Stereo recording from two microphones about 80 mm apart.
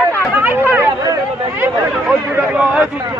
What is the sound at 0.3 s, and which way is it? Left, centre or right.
Chatter, right.